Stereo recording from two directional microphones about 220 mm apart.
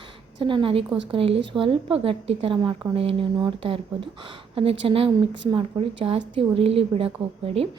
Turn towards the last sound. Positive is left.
turn(degrees=-25)  # may be behind; listen again after turning